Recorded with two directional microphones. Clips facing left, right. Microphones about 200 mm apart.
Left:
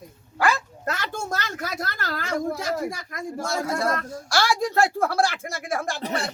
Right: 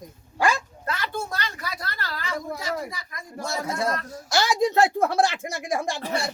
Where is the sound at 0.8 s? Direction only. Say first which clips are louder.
Left 1 dB; 45° left (ahead or behind).